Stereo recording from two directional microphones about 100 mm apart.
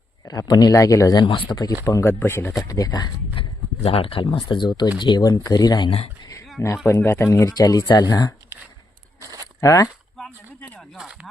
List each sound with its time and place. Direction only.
0.3 s a man's voice: 40° left (ahead or behind)
1.2 s speech: 45° left (ahead or behind)
1.8 s speech: 30° left (ahead or behind)
2.6 s a man's voice: 40° left (ahead or behind)
3.4 s speech: 60° left (ahead or behind)
4.9 s a man's voice: 45° left (ahead or behind)
6.8 s speech: 25° left (ahead or behind)
7.5 s a man's voice: 35° left (ahead or behind)
9.2 s a sound: 35° right (ahead or behind)
9.6 s speech: 35° left (ahead or behind)
10.2 s a sound: 5° left (ahead or behind)
10.9 s speech: 10° right (ahead or behind)